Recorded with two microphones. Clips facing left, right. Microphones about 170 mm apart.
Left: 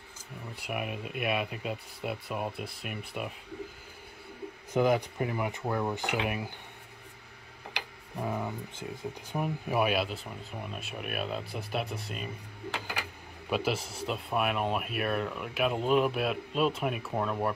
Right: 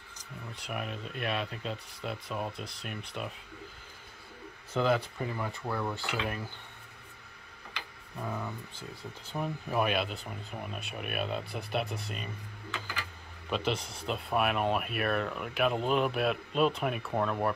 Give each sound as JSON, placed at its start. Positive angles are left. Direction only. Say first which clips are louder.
{"t": 0.6, "sound": "speech", "louder": "left 3 dB", "side_deg": 10}
{"t": 4.7, "sound": "speech", "louder": "left 3 dB", "side_deg": 15}
{"t": 8.2, "sound": "speech", "louder": "left 4 dB", "side_deg": 20}
{"t": 13.5, "sound": "speech", "louder": "left 2 dB", "side_deg": 5}